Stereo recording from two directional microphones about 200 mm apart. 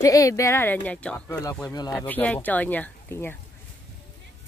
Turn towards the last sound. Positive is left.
turn(degrees=10)  # may be behind; listen again after turning